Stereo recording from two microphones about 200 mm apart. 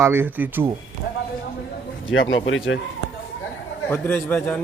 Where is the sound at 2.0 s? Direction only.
75° left (ahead or behind).